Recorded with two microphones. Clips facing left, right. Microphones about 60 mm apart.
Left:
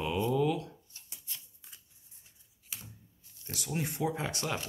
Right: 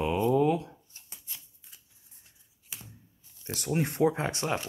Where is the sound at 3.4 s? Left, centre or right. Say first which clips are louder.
Right 6 dB; right.